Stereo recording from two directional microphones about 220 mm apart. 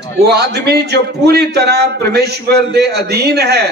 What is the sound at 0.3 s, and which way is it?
A man's voice, 50° right (ahead or behind).